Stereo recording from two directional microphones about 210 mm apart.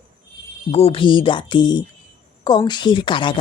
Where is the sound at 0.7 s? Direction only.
30° left (ahead or behind).